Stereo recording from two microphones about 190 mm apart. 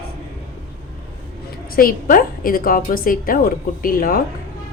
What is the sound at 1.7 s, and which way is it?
A woman's voice, 50° left (ahead or behind).